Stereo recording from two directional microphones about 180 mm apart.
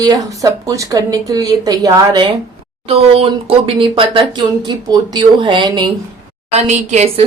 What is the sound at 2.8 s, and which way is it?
Speech, 35° right (ahead or behind).